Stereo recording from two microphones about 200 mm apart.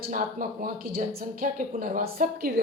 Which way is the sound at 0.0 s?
45° right (ahead or behind).